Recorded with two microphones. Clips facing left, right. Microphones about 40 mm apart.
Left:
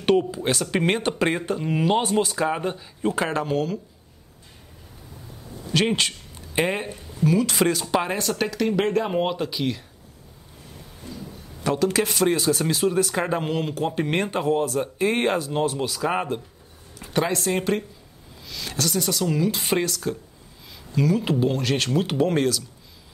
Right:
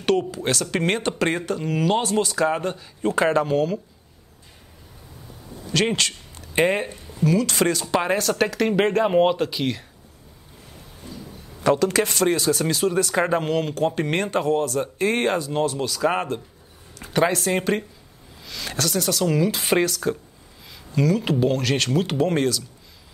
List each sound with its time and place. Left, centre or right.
0.4 s speech: centre
5.9 s a sound: centre
6.5 s speech: centre
7.2 s speech: centre
8.5 s speech: centre
11.0 s a sound: centre
11.9 s speech: centre